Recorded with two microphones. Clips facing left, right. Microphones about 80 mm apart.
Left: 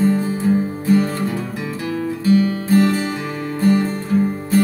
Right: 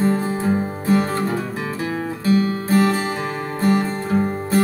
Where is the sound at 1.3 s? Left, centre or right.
Right.